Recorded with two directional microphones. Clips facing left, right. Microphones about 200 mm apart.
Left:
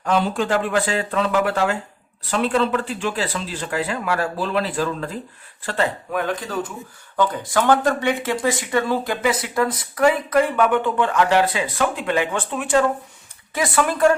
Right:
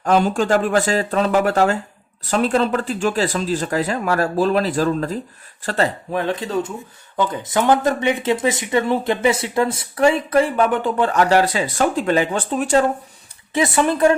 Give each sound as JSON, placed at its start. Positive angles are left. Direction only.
{"t": 0.0, "sound": "speech", "side_deg": -45}
{"t": 13.5, "sound": "speech", "side_deg": -25}